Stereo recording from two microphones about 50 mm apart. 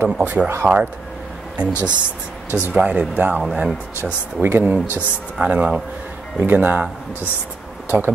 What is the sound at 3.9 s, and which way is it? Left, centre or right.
Speech, right.